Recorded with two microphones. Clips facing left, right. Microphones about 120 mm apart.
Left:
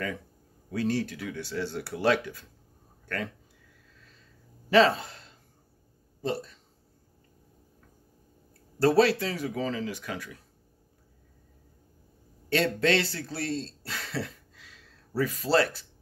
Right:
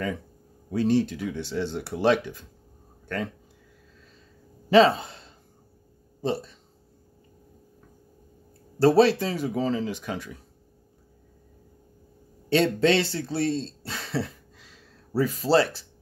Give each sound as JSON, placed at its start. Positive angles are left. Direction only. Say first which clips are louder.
{"t": 0.7, "sound": "speech", "louder": "right 6 dB", "side_deg": -25}
{"t": 4.6, "sound": "speech", "louder": "right 4 dB", "side_deg": -20}
{"t": 6.2, "sound": "speech", "louder": "right 3 dB", "side_deg": -25}
{"t": 8.7, "sound": "speech", "louder": "right 4 dB", "side_deg": -25}
{"t": 12.4, "sound": "speech", "louder": "right 4 dB", "side_deg": -20}